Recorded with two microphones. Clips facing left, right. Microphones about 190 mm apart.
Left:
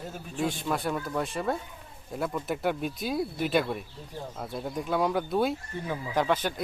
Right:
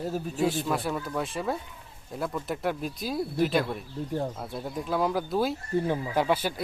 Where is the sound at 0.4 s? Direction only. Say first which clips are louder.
Right 1 dB; centre (ahead or behind).